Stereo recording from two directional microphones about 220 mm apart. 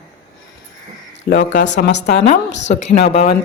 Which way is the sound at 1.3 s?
55° left (ahead or behind).